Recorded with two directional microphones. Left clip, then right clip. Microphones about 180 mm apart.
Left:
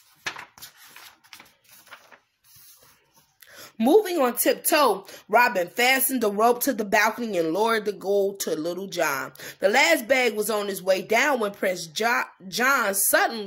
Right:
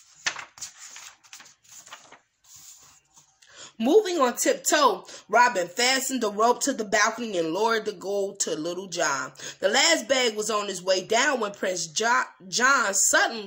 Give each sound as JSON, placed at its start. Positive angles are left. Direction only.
{"t": 3.5, "sound": "speech", "side_deg": 30}